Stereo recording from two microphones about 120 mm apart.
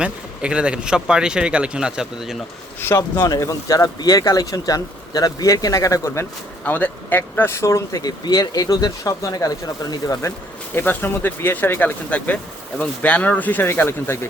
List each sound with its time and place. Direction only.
0.0 s speech: 10° right (ahead or behind)
2.8 s speech: 20° left (ahead or behind)
3.2 s speech: 30° left (ahead or behind)
6.7 s speech: 15° left (ahead or behind); by 10.3 s 30° left (ahead or behind)
10.8 s speech: 15° left (ahead or behind)